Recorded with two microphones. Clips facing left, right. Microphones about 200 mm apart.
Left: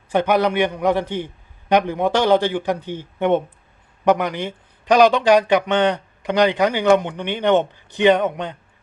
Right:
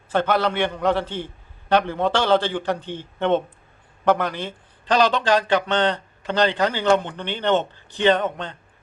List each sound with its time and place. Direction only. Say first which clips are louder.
0.1 s a man's voice: left 3 dB; 15° left (ahead or behind)